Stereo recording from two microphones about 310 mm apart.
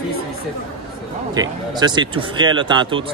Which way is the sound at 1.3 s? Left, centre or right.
Centre.